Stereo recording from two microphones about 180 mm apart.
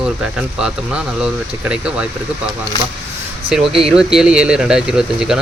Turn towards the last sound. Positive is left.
turn(degrees=-5)  # may be behind; listen again after turning